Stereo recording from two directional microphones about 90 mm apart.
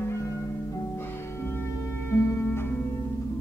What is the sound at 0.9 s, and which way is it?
Music, 25° left (ahead or behind).